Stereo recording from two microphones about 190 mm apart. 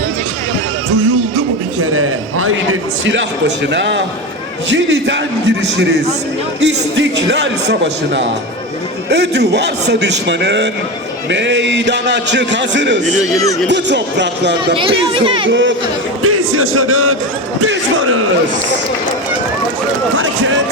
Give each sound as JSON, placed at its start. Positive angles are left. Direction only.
{"t": 1.9, "sound": "a sound", "side_deg": -90}
{"t": 3.1, "sound": "a man's voice", "side_deg": -70}
{"t": 14.8, "sound": "speech", "side_deg": -25}
{"t": 15.4, "sound": "a man's voice", "side_deg": -75}
{"t": 16.2, "sound": "a man's voice", "side_deg": -90}
{"t": 20.1, "sound": "a man's voice", "side_deg": -90}